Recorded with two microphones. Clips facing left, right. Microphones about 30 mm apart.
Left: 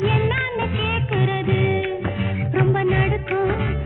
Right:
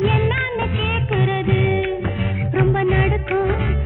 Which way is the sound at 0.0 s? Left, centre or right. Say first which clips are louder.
Right 2 dB; right.